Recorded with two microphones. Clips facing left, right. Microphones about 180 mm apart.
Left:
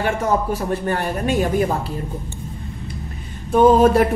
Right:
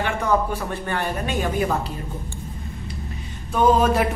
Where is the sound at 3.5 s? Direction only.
50° left (ahead or behind).